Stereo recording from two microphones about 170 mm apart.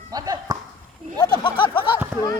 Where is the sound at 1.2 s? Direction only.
25° left (ahead or behind).